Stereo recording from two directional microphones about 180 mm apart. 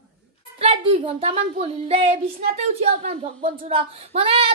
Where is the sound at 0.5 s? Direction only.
30° right (ahead or behind).